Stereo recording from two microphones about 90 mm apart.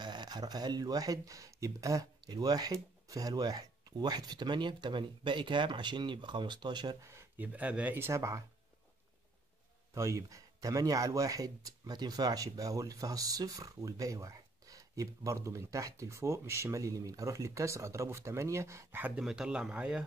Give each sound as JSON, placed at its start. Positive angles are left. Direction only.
{"t": 0.0, "sound": "speech", "side_deg": -55}
{"t": 7.0, "sound": "speech", "side_deg": -30}
{"t": 7.3, "sound": "speech", "side_deg": -20}
{"t": 8.1, "sound": "speech", "side_deg": -35}
{"t": 9.9, "sound": "speech", "side_deg": -35}
{"t": 19.1, "sound": "speech", "side_deg": -10}